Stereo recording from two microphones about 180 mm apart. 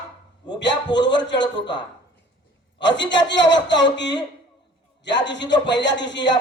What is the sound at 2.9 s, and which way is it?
A man's voice, 85° left.